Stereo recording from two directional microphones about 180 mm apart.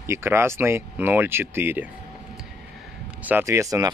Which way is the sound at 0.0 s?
15° right (ahead or behind).